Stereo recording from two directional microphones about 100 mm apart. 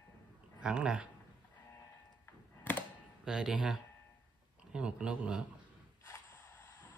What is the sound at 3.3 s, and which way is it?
Speech, 5° right (ahead or behind).